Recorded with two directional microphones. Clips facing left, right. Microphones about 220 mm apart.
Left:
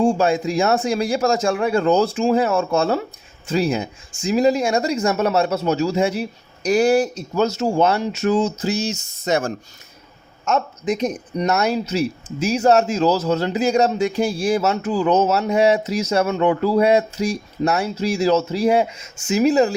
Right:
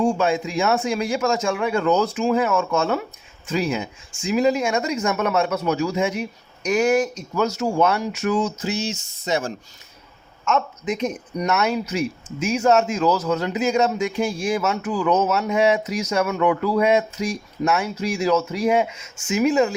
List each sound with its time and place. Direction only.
0.0 s a man's voice: 35° left (ahead or behind)
10.4 s a man's voice: 35° left (ahead or behind)